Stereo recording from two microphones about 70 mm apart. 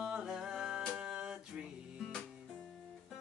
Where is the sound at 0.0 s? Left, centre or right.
Centre.